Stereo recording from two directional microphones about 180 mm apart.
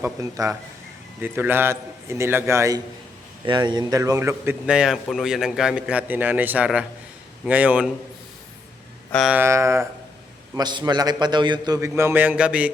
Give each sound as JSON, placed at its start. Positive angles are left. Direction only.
{"t": 0.0, "sound": "a man's voice", "side_deg": -20}
{"t": 9.1, "sound": "a sound", "side_deg": 0}
{"t": 9.4, "sound": "a man's voice", "side_deg": -15}